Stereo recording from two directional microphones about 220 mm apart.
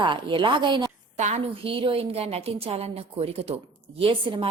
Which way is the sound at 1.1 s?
30° right (ahead or behind).